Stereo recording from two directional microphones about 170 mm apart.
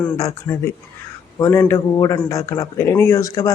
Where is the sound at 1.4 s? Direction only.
15° left (ahead or behind).